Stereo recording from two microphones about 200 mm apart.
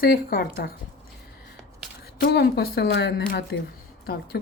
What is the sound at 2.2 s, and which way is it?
Speech, 50° left (ahead or behind).